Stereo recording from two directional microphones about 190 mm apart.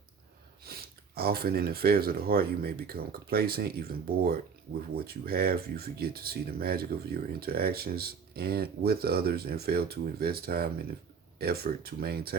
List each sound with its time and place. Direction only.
0.6 s speech: 55° right (ahead or behind)